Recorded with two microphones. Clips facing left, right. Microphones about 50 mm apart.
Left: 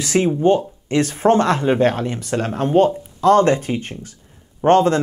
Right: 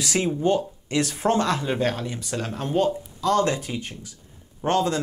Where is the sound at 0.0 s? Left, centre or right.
Left.